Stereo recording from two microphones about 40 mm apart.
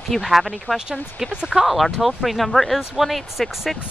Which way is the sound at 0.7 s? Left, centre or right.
Left.